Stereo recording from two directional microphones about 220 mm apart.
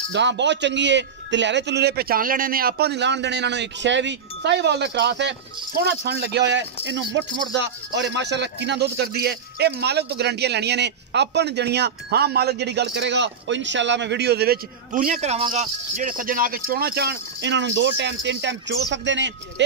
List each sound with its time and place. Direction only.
0.1 s speech: 55° right (ahead or behind)